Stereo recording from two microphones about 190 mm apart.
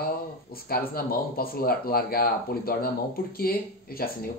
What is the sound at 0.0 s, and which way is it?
Speech, 50° left (ahead or behind).